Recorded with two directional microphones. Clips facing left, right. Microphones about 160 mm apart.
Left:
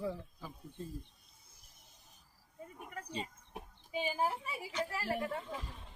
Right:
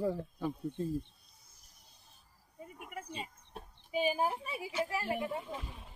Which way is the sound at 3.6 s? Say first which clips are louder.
Even; 15° left (ahead or behind).